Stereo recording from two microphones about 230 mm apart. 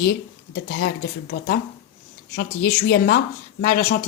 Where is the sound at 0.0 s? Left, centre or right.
Left.